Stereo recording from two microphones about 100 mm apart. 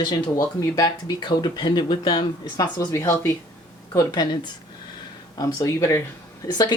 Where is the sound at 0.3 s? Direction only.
40° left (ahead or behind).